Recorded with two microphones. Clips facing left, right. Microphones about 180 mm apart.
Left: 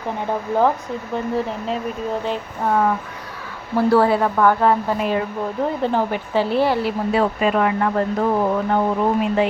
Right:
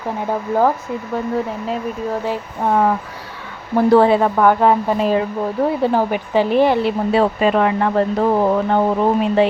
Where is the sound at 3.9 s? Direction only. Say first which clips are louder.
Right 4 dB; 20° right (ahead or behind).